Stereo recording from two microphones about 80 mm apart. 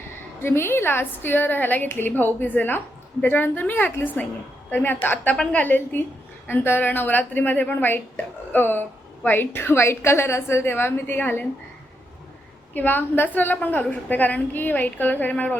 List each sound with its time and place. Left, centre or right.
0.4 s a woman's voice: left
12.7 s a woman's voice: left